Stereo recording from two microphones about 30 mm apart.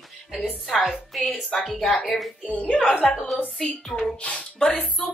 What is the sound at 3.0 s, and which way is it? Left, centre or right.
Speech, centre.